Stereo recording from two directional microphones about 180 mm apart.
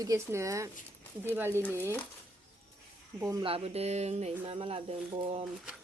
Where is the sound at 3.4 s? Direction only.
35° right (ahead or behind).